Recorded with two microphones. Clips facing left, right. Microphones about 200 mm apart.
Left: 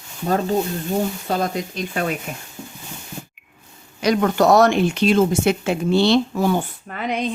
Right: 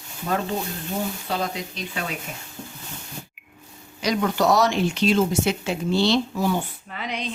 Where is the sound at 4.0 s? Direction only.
55° left (ahead or behind).